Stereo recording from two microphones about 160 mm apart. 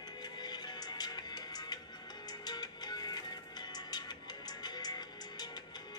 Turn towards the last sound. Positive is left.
turn(degrees=25)  # may be behind; listen again after turning